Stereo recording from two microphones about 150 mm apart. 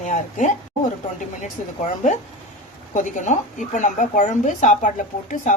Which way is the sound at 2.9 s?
55° left (ahead or behind).